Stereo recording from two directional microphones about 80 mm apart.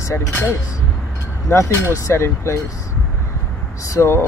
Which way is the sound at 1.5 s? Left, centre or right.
Left.